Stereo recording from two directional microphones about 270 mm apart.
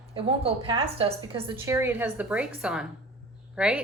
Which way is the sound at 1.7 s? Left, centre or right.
Centre.